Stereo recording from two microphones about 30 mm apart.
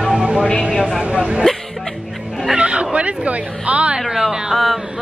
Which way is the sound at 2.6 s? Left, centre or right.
Right.